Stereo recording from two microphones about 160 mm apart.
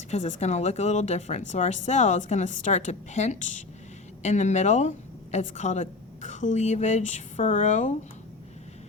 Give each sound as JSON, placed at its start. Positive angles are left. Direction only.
{"t": 0.1, "sound": "a woman's voice", "side_deg": 45}